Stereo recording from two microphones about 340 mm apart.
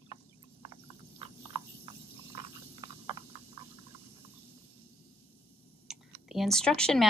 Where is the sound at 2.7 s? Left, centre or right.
Centre.